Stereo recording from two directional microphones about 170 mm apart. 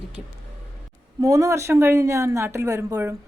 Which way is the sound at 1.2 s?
20° right (ahead or behind).